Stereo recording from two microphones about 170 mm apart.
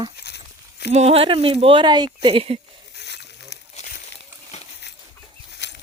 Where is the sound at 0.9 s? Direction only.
40° right (ahead or behind).